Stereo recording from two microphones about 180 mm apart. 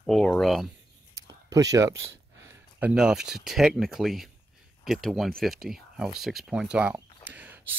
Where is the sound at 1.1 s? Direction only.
20° right (ahead or behind).